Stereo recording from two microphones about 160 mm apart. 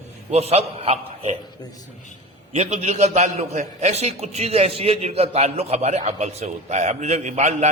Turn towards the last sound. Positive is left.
turn(degrees=-45)  # may be behind; listen again after turning